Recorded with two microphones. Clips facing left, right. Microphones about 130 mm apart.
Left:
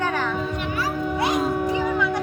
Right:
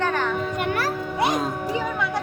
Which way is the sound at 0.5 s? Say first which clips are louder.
Right 2 dB; 60° right (ahead or behind).